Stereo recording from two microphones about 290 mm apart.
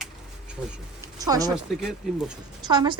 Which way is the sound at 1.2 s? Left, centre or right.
Centre.